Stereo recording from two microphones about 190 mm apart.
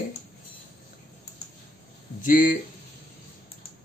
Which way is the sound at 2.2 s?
45° left (ahead or behind).